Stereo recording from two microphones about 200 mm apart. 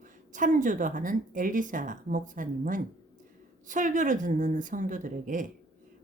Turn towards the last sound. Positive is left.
turn(degrees=-40)  # may be behind; listen again after turning